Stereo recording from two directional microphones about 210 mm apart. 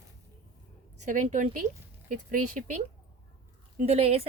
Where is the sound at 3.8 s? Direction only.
30° right (ahead or behind).